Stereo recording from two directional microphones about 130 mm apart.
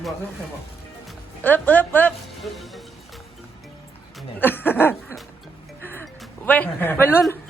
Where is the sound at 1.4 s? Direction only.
15° left (ahead or behind).